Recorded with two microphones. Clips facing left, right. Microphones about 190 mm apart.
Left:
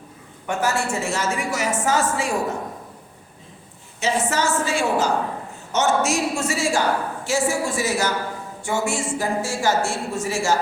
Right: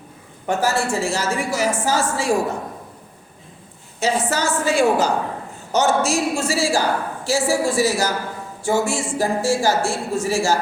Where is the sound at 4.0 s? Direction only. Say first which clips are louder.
Right 1 dB; 35° right (ahead or behind).